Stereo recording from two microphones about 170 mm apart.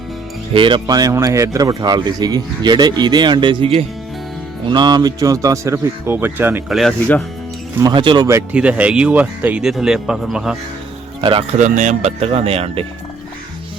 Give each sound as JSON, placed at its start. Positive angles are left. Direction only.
{"t": 0.5, "sound": "speech", "side_deg": -30}
{"t": 6.7, "sound": "speech", "side_deg": 0}
{"t": 7.8, "sound": "speech", "side_deg": -25}
{"t": 11.2, "sound": "speech", "side_deg": -30}
{"t": 11.5, "sound": "speech", "side_deg": -45}